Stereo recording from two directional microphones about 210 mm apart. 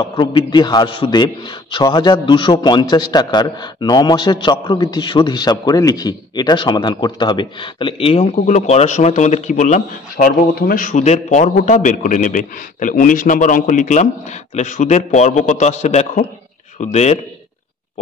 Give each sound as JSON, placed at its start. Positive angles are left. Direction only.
{"t": 0.0, "sound": "a man's voice", "side_deg": 25}